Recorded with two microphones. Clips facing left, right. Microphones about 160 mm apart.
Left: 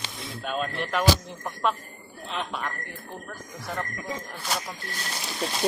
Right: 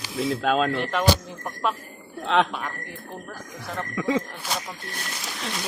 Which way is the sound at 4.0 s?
90° right.